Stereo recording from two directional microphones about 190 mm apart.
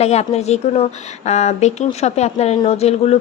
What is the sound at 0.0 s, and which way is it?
A woman's voice, 35° left (ahead or behind).